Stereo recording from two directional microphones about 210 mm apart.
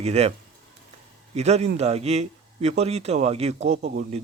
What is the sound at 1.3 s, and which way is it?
A man's voice, 30° right (ahead or behind).